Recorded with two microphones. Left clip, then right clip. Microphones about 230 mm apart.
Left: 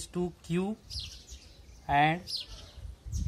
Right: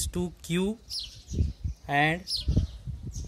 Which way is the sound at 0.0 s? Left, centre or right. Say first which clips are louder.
Right 1 dB; right.